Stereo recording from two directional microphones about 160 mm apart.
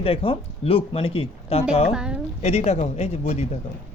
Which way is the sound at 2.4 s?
40° left (ahead or behind).